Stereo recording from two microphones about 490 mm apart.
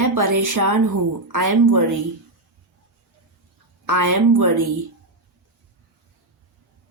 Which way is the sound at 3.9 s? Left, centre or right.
Right.